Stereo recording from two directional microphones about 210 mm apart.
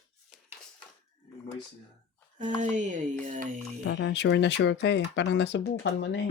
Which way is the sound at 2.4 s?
35° right (ahead or behind).